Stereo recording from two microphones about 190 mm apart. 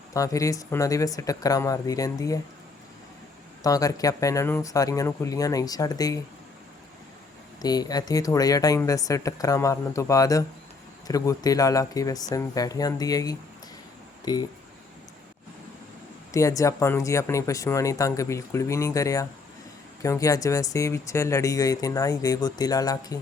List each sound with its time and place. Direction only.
0.1 s speech: 15° left (ahead or behind)
3.6 s speech: 20° left (ahead or behind)
7.6 s speech: 20° left (ahead or behind)
16.3 s speech: 15° left (ahead or behind)